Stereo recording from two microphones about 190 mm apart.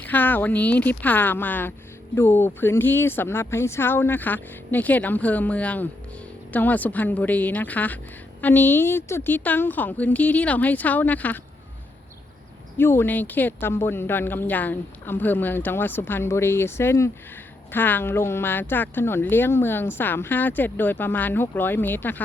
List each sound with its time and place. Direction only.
0.0 s speech: 10° left (ahead or behind)
12.7 s speech: 10° left (ahead or behind)